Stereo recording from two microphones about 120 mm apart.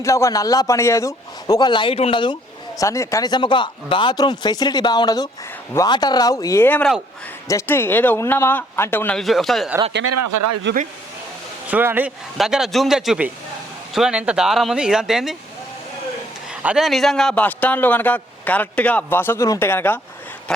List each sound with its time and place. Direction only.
0.0 s a man's voice: 25° left (ahead or behind); by 2.8 s 40° left (ahead or behind)
2.8 s a man's voice: 25° left (ahead or behind)
6.7 s a man's voice: 15° left (ahead or behind)
9.1 s speech: centre (ahead or behind)
11.7 s speech: 15° right (ahead or behind)
12.4 s speech: 5° right (ahead or behind)
16.5 s a man's voice: 5° right (ahead or behind); by 20.0 s 20° left (ahead or behind)